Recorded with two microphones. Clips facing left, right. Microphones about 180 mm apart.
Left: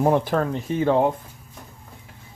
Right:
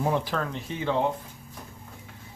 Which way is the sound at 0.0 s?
50° left (ahead or behind).